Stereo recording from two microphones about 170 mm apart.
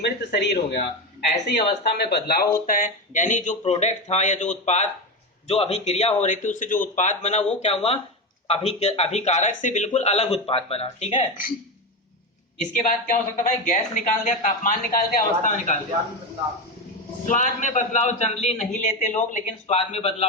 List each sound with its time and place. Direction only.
0.0 s speech: 85° left
1.8 s speech: 70° left (ahead or behind)
2.6 s speech: 55° left (ahead or behind); by 11.3 s 30° left (ahead or behind)
12.5 s speech: 50° left (ahead or behind)
17.2 s speech: 50° left (ahead or behind)